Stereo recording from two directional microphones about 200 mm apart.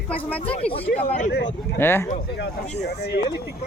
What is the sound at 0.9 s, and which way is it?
Speech, 40° left (ahead or behind).